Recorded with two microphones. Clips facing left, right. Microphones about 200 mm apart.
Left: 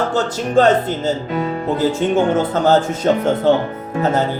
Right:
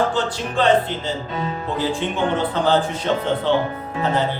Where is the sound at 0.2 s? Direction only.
45° left (ahead or behind).